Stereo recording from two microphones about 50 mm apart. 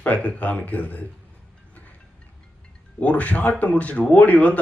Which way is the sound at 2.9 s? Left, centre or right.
Left.